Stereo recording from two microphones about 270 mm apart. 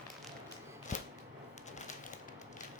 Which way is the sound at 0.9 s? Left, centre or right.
Left.